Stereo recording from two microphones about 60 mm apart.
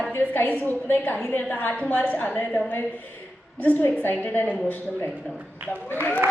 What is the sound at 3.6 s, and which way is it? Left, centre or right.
Speech, left.